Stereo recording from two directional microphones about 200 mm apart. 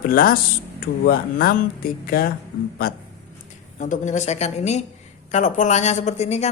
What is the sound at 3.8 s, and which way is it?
Speech, 40° left (ahead or behind).